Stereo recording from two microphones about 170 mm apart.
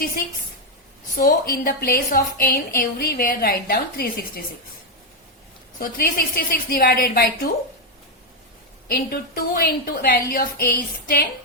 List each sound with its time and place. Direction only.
1.1 s a woman's voice: 60° left (ahead or behind)
5.8 s a woman's voice: 60° left (ahead or behind)
8.9 s a woman's voice: 65° left (ahead or behind)